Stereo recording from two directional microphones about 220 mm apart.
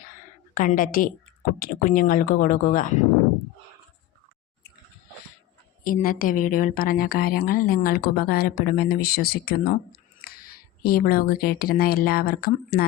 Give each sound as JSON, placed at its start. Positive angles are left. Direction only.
{"t": 0.0, "sound": "a sound", "side_deg": 35}
{"t": 1.5, "sound": "speech", "side_deg": 40}
{"t": 5.8, "sound": "speech", "side_deg": 40}